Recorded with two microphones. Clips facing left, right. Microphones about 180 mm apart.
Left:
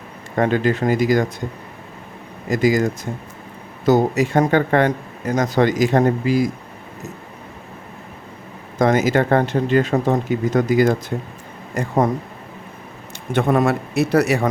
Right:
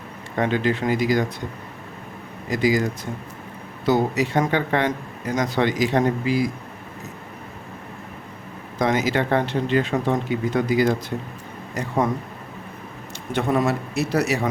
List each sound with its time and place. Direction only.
0.3 s speech: 45° left (ahead or behind)
2.5 s speech: 45° left (ahead or behind)
8.8 s speech: 50° left (ahead or behind)
13.3 s speech: 55° left (ahead or behind)